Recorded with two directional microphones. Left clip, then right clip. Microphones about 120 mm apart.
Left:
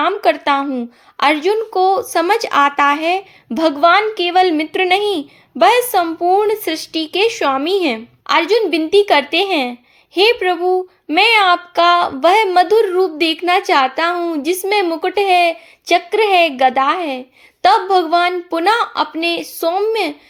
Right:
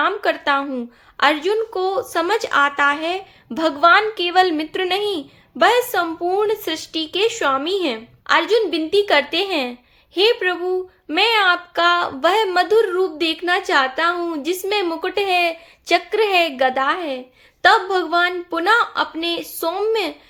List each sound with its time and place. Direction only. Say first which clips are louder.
0.0 s speech: left 4 dB; 35° left (ahead or behind)
1.1 s speech: left 3 dB; 35° left (ahead or behind)